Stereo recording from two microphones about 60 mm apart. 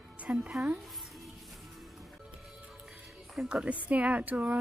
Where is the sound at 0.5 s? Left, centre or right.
Centre.